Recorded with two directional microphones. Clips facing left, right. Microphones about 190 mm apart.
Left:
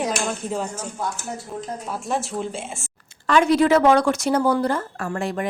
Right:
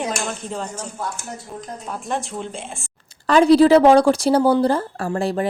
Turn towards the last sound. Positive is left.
turn(degrees=-35)  # may be behind; listen again after turning